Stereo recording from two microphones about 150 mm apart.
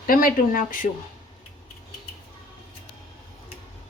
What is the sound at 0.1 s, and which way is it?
Speech, 65° left (ahead or behind).